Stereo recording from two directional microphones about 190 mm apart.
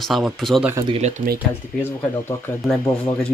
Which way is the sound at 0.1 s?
Centre (ahead or behind).